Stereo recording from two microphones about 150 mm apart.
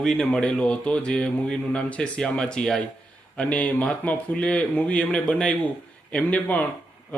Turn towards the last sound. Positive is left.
turn(degrees=10)  # may be behind; listen again after turning